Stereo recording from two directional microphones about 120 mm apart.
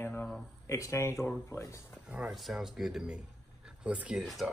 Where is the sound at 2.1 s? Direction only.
5° right (ahead or behind).